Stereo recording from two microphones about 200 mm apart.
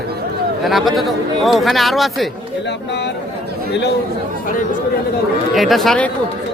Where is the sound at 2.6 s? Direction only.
60° left (ahead or behind).